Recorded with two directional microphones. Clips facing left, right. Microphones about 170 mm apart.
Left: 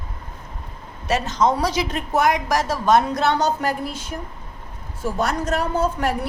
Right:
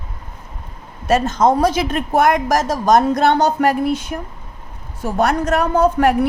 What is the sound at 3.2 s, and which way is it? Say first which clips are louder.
A woman's voice: right 6 dB; 60° right (ahead or behind).